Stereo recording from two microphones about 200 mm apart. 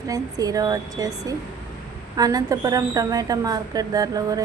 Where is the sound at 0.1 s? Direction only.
20° right (ahead or behind).